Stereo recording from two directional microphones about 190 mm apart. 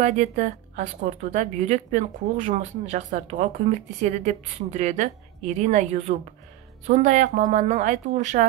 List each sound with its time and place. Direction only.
0.0 s a woman's voice: 40° right (ahead or behind)